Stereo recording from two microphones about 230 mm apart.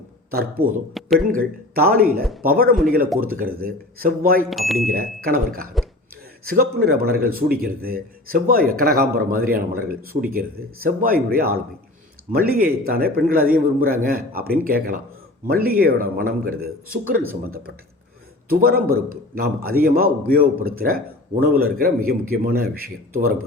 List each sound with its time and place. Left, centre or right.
0.6 s a man's voice: right
1.0 s a sound: centre
1.3 s a man's voice: right
4.4 s speech: centre
4.8 s a man's voice: right
18.4 s a man's voice: right